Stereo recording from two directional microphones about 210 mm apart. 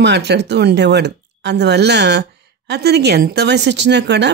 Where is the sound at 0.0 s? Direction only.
55° right (ahead or behind).